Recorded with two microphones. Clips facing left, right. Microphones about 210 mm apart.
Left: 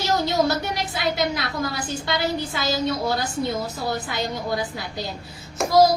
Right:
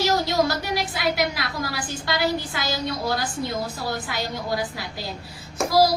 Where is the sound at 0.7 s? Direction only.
20° left (ahead or behind).